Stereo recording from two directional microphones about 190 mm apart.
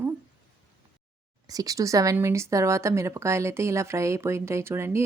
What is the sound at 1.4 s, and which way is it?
A woman's voice, 20° right (ahead or behind).